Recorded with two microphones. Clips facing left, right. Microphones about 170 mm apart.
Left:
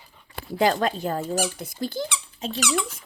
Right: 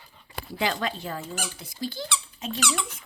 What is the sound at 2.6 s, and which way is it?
Squeak, 10° left (ahead or behind).